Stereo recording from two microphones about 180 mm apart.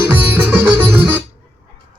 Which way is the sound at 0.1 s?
10° right (ahead or behind).